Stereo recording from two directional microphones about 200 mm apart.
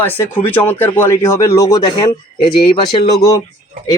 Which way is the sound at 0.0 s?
10° left (ahead or behind).